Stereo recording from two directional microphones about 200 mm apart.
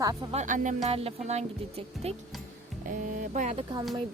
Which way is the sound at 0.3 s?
40° right (ahead or behind).